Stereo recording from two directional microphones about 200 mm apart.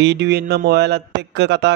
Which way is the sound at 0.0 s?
60° right (ahead or behind).